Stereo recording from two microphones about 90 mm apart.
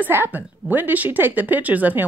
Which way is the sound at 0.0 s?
20° right (ahead or behind).